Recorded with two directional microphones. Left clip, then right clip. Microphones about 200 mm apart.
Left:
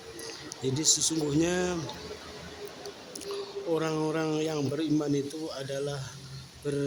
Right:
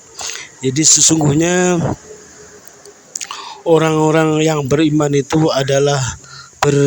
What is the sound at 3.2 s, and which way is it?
Speech, 55° right (ahead or behind).